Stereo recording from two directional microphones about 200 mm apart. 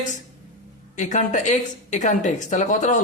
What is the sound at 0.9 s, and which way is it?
Speech, 40° left (ahead or behind).